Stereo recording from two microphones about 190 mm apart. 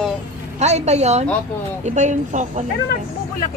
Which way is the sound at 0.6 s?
35° right (ahead or behind).